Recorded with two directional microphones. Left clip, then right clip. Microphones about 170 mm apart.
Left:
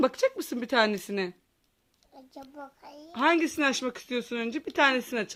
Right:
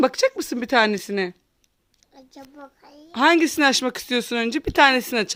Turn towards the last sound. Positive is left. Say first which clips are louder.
# right 7 dB
turn(degrees=-60)  # may be behind; listen again after turning